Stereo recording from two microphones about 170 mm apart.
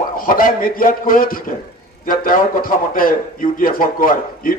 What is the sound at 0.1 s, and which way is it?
A man's voice, 55° left (ahead or behind).